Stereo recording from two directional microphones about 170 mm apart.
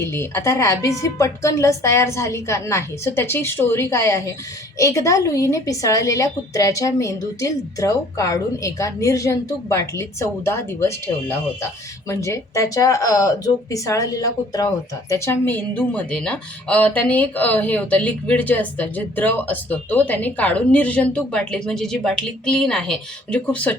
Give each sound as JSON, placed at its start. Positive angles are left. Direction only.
{"t": 0.0, "sound": "a woman's voice", "side_deg": 15}